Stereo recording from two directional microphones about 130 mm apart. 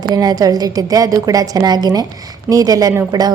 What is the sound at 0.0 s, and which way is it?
A woman's voice, 30° right (ahead or behind).